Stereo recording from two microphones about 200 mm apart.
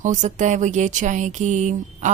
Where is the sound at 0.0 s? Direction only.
35° right (ahead or behind).